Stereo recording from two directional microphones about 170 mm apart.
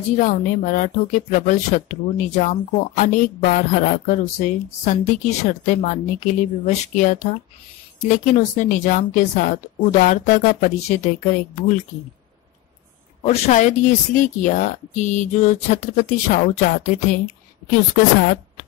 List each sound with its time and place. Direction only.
0.2 s speech: 50° left (ahead or behind)
13.2 s speech: 45° left (ahead or behind)